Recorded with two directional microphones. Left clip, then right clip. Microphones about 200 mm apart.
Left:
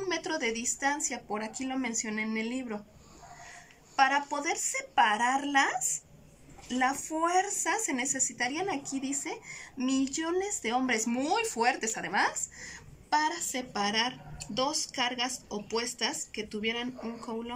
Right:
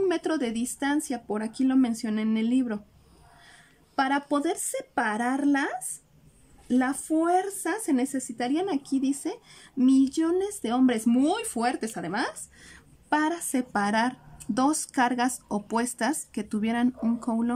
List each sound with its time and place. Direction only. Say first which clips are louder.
0.0 s speech: right 5 dB; 55° right (ahead or behind)
3.9 s speech: even; 55° right (ahead or behind)
6.8 s speech: right 1 dB; 50° right (ahead or behind)
13.1 s speech: right 3 dB; 60° right (ahead or behind)